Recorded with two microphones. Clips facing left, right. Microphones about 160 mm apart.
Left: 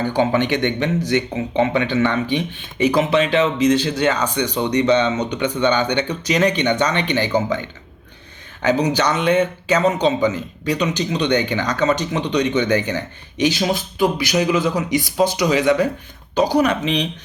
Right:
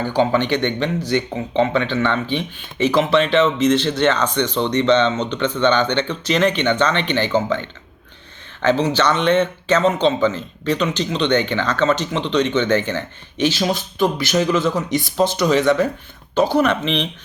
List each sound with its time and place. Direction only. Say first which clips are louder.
0.0 s a man's voice: even; 20° left (ahead or behind)